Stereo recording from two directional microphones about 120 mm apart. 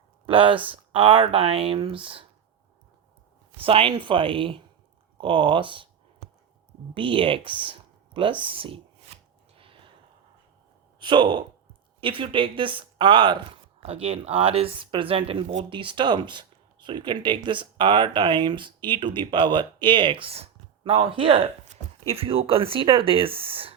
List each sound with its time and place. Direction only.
0.3 s speech: 50° right (ahead or behind)
3.6 s speech: 50° right (ahead or behind)
6.9 s speech: 45° right (ahead or behind)
9.6 s a sound: 45° right (ahead or behind)
11.0 s speech: 40° right (ahead or behind)
13.8 s speech: 55° right (ahead or behind)